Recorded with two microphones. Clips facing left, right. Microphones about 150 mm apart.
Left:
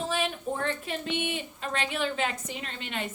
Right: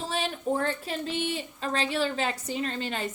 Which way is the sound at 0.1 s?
35° right (ahead or behind).